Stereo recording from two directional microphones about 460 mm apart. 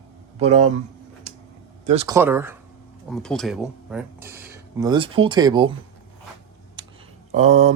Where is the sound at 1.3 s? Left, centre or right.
Centre.